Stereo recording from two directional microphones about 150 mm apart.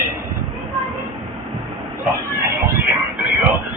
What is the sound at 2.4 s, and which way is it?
Music, 15° right (ahead or behind).